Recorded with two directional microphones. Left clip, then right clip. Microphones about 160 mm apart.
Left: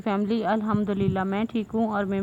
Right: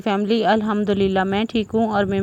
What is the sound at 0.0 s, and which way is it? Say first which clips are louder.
A woman's voice: right 7 dB; 35° right (ahead or behind).